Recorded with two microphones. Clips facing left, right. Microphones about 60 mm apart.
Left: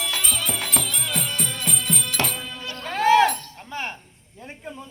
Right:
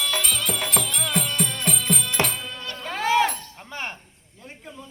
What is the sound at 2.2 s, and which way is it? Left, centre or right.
Music, right.